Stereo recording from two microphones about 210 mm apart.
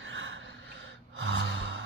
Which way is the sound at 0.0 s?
65° right (ahead or behind).